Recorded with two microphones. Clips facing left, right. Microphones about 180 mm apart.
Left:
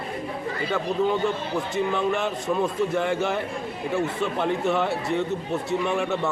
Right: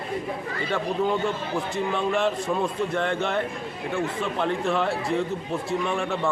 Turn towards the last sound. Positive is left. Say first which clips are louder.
# left 2 dB
turn(degrees=5)  # may be behind; listen again after turning